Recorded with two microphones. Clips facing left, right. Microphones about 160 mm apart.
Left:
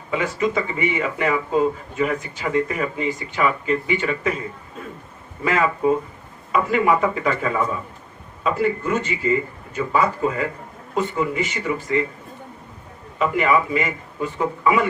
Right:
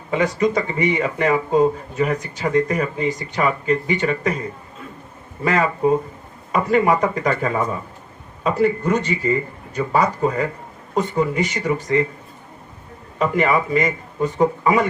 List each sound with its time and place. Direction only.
0.1 s speech: 40° right (ahead or behind)
5.5 s speech: 40° right (ahead or behind)
13.1 s speech: 40° right (ahead or behind)